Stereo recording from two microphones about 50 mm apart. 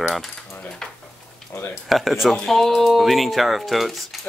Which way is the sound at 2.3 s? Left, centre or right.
Centre.